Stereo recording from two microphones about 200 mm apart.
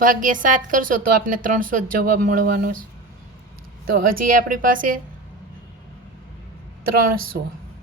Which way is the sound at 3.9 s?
45° right (ahead or behind).